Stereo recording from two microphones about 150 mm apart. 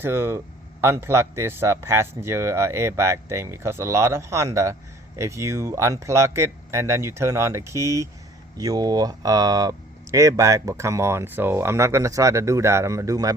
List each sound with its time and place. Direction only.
0.0 s speech: 15° right (ahead or behind)